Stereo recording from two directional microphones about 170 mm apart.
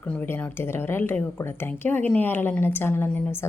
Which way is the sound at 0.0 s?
10° left (ahead or behind).